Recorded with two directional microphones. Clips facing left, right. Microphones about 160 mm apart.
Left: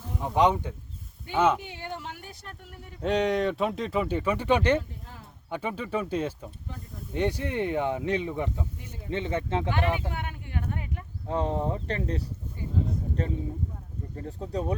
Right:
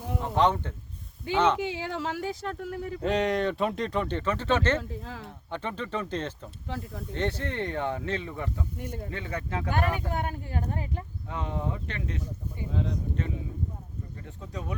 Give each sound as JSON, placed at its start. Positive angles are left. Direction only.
{"t": 0.2, "sound": "speech", "side_deg": 10}
{"t": 1.5, "sound": "speech", "side_deg": -90}
{"t": 3.0, "sound": "speech", "side_deg": 0}
{"t": 4.8, "sound": "speech", "side_deg": -90}
{"t": 5.5, "sound": "speech", "side_deg": 10}
{"t": 6.7, "sound": "speech", "side_deg": -90}
{"t": 7.1, "sound": "speech", "side_deg": 10}
{"t": 9.6, "sound": "speech", "side_deg": -45}
{"t": 11.3, "sound": "speech", "side_deg": 35}
{"t": 12.7, "sound": "speech", "side_deg": -90}
{"t": 13.2, "sound": "speech", "side_deg": 35}